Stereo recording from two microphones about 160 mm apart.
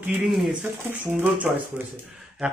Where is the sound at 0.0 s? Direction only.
5° right (ahead or behind).